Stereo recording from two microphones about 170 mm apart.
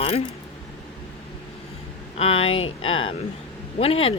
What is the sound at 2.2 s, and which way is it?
Speech, 35° left (ahead or behind).